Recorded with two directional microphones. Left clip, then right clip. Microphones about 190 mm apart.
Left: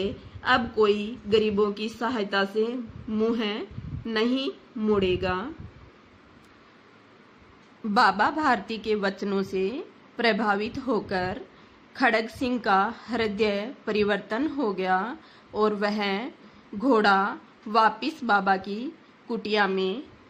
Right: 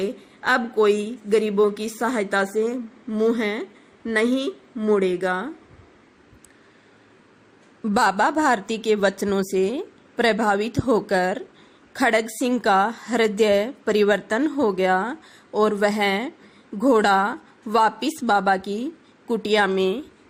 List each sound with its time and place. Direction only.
0.0 s a woman's voice: 25° right (ahead or behind)
7.9 s a woman's voice: 35° right (ahead or behind)